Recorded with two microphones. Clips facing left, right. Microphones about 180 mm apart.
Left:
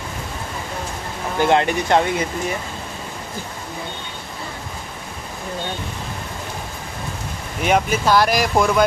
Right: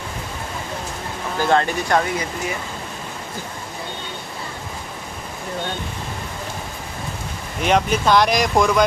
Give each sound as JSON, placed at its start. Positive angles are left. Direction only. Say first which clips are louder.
{"t": 1.4, "sound": "speech", "louder": "left 2 dB", "side_deg": 20}
{"t": 7.6, "sound": "speech", "louder": "even", "side_deg": 5}